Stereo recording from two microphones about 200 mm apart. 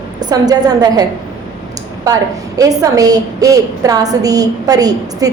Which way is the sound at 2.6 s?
15° right (ahead or behind).